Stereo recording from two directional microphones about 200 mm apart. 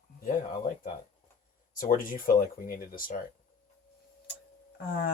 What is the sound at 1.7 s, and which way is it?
Speech, 45° left (ahead or behind).